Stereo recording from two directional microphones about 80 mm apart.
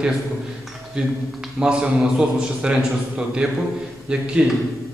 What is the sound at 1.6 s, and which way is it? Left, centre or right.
A man's voice, centre.